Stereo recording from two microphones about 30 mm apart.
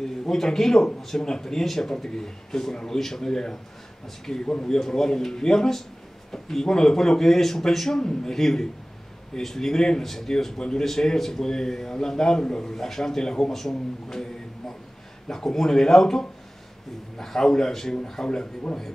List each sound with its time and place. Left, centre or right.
0.3 s a man's voice: centre
12.7 s speech: centre
13.5 s speech: centre
15.2 s a man's voice: centre